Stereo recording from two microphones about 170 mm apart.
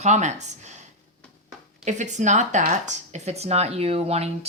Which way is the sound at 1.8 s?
45° right (ahead or behind).